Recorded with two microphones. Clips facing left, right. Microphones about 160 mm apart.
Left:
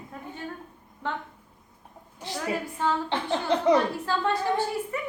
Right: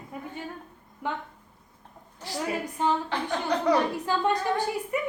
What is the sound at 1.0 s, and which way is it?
Speech, 10° right (ahead or behind).